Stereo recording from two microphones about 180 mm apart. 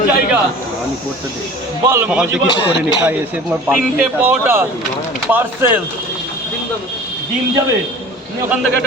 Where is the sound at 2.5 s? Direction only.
25° left (ahead or behind).